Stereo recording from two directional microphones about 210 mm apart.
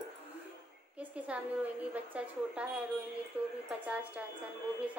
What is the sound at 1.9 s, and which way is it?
A woman's voice, 5° right (ahead or behind).